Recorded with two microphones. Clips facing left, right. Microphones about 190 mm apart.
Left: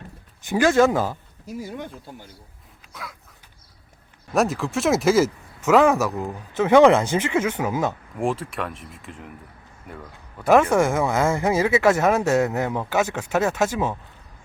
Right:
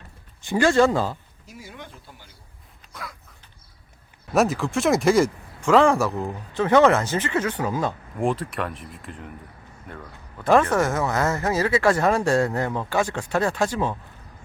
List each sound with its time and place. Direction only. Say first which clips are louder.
0.5 s speech: left 1 dB; 5° left (ahead or behind)
1.6 s speech: left 6 dB; 45° left (ahead or behind)
2.9 s a sound: even; centre (ahead or behind)
4.4 s speech: right 1 dB; centre (ahead or behind)